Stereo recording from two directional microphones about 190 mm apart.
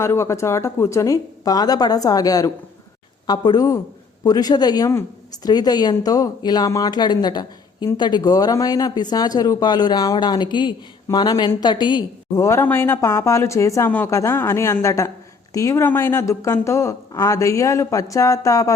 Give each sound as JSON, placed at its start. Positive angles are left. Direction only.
{"t": 0.0, "sound": "speech", "side_deg": 15}